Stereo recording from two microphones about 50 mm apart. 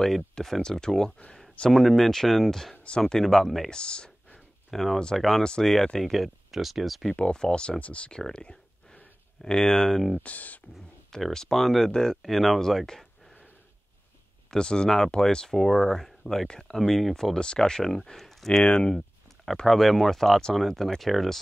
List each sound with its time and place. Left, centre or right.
0.0 s speech: centre
3.7 s a sound: centre
4.6 s speech: centre
7.1 s speech: left
8.3 s a sound: centre
10.2 s speech: left
11.1 s speech: centre
14.5 s speech: centre
18.6 s speech: centre
19.6 s speech: centre